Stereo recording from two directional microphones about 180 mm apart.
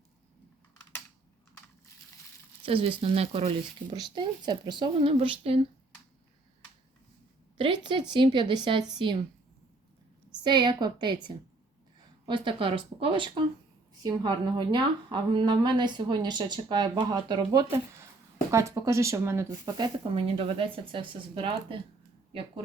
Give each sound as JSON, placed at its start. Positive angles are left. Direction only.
{"t": 2.6, "sound": "a woman's voice", "side_deg": -30}
{"t": 7.6, "sound": "a woman's voice", "side_deg": -25}
{"t": 10.4, "sound": "a woman's voice", "side_deg": -25}